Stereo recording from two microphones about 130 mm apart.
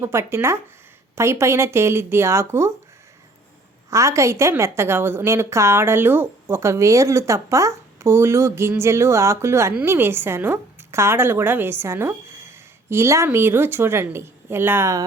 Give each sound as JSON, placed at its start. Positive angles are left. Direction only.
{"t": 0.0, "sound": "a woman's voice", "side_deg": -20}
{"t": 3.8, "sound": "a woman's voice", "side_deg": -20}